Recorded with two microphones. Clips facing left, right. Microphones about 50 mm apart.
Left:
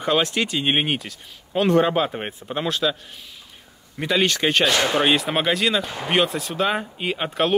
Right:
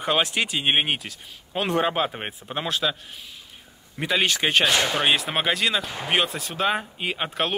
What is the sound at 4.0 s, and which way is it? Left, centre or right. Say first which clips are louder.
Speech: left 2 dB; centre.